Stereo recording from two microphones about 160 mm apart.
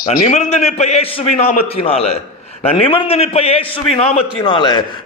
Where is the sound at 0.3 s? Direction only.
45° left (ahead or behind).